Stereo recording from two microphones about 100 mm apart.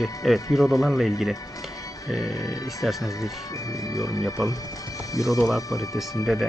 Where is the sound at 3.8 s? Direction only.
35° left (ahead or behind).